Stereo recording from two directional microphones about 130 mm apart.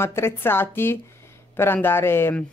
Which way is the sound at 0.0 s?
20° left (ahead or behind).